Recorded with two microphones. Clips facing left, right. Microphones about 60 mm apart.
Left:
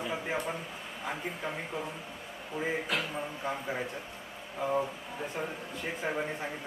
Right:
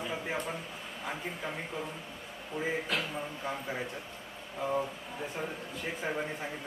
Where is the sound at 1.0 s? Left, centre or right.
Centre.